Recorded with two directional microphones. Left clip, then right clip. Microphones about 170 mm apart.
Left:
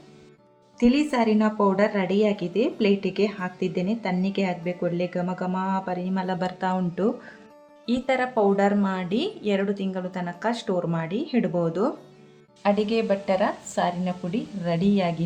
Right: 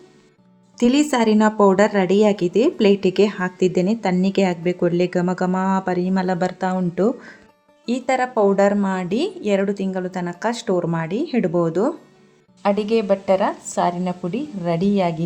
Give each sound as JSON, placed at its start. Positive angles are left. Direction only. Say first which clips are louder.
{"t": 0.8, "sound": "a woman's voice", "louder": "right 4 dB", "side_deg": -50}
{"t": 12.6, "sound": "a woman's voice", "louder": "right 4 dB", "side_deg": -40}